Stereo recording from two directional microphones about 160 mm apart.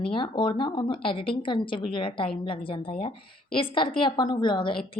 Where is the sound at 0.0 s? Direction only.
30° left (ahead or behind).